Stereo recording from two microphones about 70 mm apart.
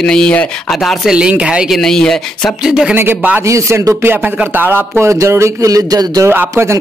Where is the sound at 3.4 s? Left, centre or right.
Right.